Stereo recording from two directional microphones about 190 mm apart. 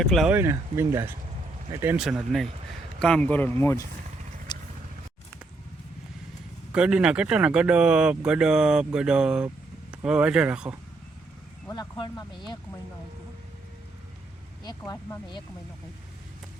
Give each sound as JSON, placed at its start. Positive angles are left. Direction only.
{"t": 0.1, "sound": "speech", "side_deg": 0}
{"t": 0.3, "sound": "speech", "side_deg": -15}
{"t": 4.5, "sound": "vehicle", "side_deg": 25}
{"t": 6.7, "sound": "speech", "side_deg": -5}
{"t": 11.7, "sound": "speech", "side_deg": 20}
{"t": 14.6, "sound": "speech", "side_deg": 20}